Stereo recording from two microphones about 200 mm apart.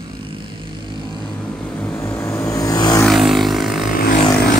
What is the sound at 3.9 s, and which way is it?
Vehicle, 45° left (ahead or behind).